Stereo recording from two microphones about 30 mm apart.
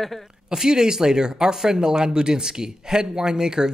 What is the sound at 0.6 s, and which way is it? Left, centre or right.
Speech, right.